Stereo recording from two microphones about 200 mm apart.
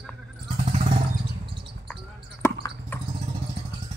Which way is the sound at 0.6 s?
35° right (ahead or behind).